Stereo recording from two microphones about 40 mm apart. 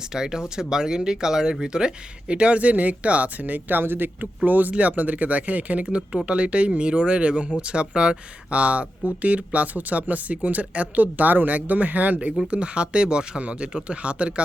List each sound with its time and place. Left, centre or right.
0.1 s speech: centre; by 4.3 s right
4.4 s speech: right
12.5 s speech: right